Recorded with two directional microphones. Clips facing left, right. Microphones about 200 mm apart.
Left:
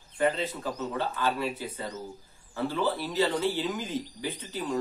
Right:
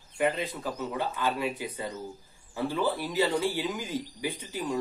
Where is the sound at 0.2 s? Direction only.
10° right (ahead or behind).